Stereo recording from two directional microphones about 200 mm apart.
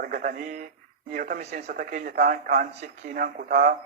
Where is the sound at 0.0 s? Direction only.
45° right (ahead or behind).